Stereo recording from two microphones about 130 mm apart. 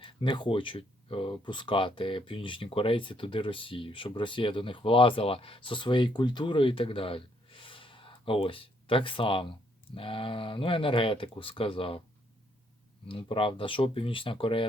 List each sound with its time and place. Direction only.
0.0 s speech: 40° left (ahead or behind)
13.1 s speech: 40° left (ahead or behind)